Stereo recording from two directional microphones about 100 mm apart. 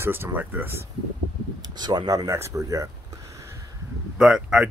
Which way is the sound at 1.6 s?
45° right (ahead or behind).